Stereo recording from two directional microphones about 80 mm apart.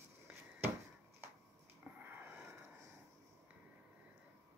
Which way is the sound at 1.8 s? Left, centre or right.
Right.